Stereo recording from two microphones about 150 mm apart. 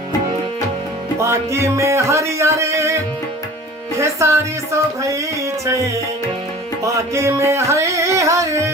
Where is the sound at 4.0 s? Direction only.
20° right (ahead or behind).